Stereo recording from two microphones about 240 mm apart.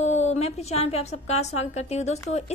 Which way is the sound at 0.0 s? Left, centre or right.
Left.